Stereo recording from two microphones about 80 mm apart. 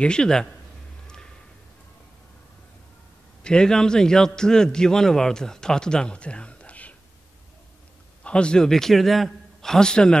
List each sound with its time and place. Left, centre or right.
0.0 s a man's voice: centre
1.0 s a sound: centre
3.4 s a man's voice: centre
8.2 s a man's voice: centre